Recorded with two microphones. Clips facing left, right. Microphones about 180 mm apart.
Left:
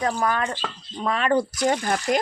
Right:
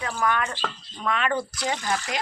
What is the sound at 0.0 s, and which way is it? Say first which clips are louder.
Speech: left 3 dB; 35° left (ahead or behind).